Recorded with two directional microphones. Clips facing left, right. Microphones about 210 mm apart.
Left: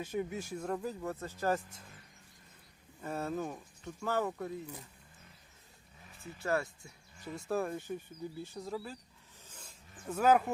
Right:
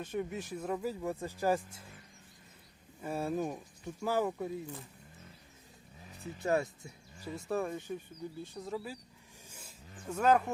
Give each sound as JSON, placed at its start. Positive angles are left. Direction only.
{"t": 0.0, "sound": "speech", "side_deg": 0}
{"t": 3.0, "sound": "speech", "side_deg": -10}
{"t": 6.1, "sound": "speech", "side_deg": -20}
{"t": 7.3, "sound": "speech", "side_deg": 0}
{"t": 9.5, "sound": "a sound", "side_deg": -10}
{"t": 10.1, "sound": "speech", "side_deg": 5}